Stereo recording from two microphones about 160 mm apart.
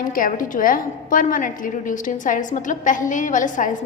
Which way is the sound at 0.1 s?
60° left (ahead or behind).